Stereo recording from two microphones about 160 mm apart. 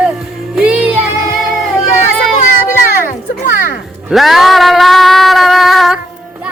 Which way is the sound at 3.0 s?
55° left (ahead or behind).